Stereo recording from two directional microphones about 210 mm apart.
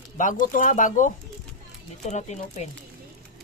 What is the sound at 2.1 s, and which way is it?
Speech, 35° left (ahead or behind).